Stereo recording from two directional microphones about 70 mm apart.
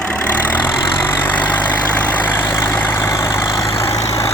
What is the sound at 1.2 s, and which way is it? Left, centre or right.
Vehicle, left.